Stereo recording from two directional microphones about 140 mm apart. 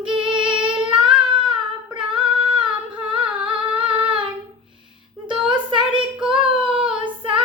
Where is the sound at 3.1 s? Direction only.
40° right (ahead or behind).